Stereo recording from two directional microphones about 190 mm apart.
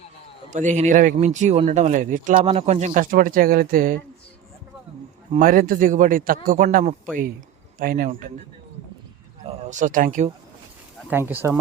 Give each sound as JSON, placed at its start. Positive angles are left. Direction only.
{"t": 0.5, "sound": "speech", "side_deg": -40}
{"t": 2.4, "sound": "a man's voice", "side_deg": -30}
{"t": 5.4, "sound": "a man's voice", "side_deg": -50}
{"t": 9.4, "sound": "speech", "side_deg": -35}
{"t": 11.1, "sound": "speech", "side_deg": -10}